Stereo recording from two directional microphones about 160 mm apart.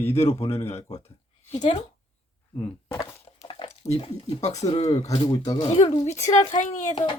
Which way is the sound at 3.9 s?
40° left (ahead or behind).